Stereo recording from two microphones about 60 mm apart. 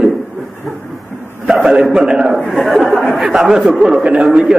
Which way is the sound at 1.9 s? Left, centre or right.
Centre.